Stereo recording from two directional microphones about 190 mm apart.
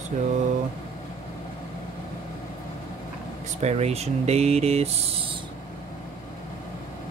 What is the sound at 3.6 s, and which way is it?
Speech, 35° right (ahead or behind).